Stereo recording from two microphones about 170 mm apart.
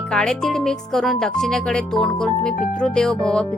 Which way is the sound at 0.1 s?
5° left (ahead or behind).